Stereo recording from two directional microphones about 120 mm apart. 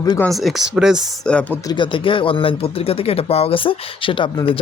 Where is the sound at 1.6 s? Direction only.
40° left (ahead or behind).